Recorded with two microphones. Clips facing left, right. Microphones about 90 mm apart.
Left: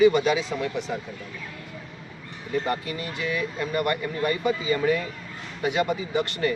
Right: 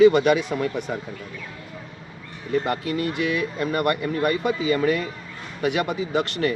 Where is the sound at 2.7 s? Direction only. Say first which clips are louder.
Right 4 dB; 60° right (ahead or behind).